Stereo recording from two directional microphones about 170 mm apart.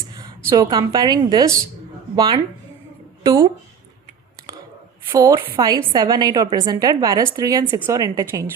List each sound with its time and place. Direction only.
0.2 s a woman's voice: 20° right (ahead or behind)
5.0 s a woman's voice: 20° right (ahead or behind)